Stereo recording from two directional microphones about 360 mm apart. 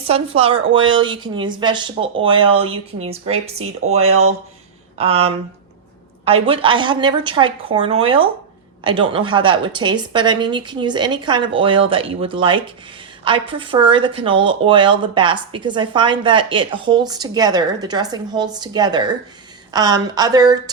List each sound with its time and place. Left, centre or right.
0.0 s a woman's voice: centre